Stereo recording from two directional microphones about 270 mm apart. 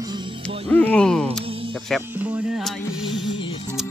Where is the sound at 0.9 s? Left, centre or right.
Centre.